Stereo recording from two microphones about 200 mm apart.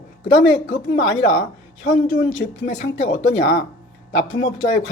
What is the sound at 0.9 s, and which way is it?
Speech, 75° left (ahead or behind).